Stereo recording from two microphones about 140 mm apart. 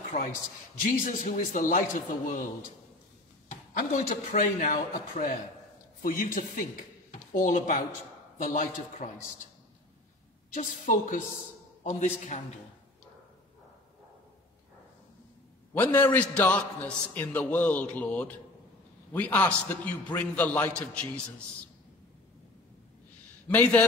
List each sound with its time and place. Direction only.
0.1 s a man's voice: 70° left (ahead or behind)
3.4 s speech: 70° left (ahead or behind)
6.0 s speech: 85° left; by 9.1 s 65° left (ahead or behind)
10.5 s speech: 60° left (ahead or behind)
15.7 s a man's voice: 15° left (ahead or behind)
23.5 s a man's voice: 10° left (ahead or behind)